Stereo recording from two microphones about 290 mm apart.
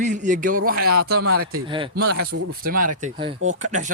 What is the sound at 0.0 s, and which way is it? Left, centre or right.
Speech, right.